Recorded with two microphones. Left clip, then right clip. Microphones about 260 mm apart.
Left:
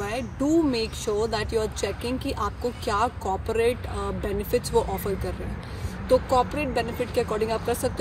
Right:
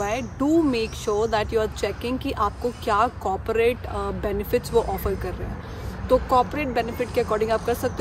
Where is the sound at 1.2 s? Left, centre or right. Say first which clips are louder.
Right 4 dB; right.